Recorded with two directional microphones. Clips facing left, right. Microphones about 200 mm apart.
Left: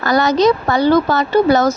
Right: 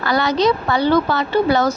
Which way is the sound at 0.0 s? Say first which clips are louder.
Left 4 dB; 45° left (ahead or behind).